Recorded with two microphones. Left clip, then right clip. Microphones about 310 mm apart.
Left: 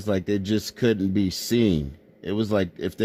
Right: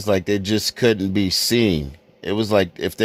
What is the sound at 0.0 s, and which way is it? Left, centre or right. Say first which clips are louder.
Speech: right 6 dB; centre.